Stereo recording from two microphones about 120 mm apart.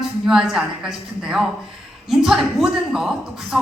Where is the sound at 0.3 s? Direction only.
5° right (ahead or behind).